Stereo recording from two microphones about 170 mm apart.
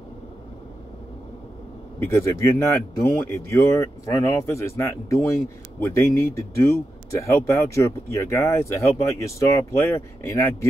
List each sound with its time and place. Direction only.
2.0 s speech: 15° left (ahead or behind)